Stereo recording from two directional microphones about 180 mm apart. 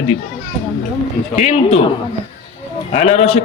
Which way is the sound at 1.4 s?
40° left (ahead or behind).